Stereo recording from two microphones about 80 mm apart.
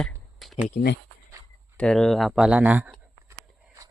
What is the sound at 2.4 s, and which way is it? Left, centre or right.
Speech, centre.